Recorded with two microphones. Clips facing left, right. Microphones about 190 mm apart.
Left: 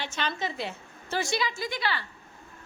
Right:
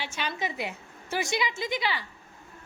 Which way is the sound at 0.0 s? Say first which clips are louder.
Left 1 dB; 10° right (ahead or behind).